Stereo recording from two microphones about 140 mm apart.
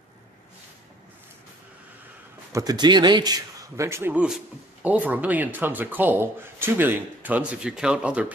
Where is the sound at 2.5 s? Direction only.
30° right (ahead or behind).